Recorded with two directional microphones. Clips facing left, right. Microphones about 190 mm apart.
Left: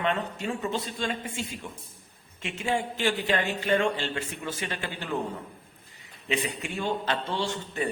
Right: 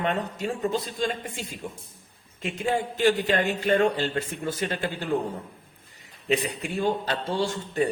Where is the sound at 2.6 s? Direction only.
40° right (ahead or behind).